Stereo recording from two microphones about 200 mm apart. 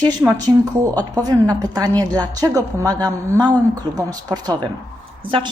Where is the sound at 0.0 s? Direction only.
20° right (ahead or behind).